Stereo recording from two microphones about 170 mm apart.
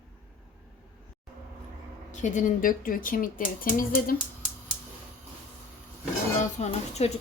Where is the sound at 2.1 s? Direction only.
45° left (ahead or behind).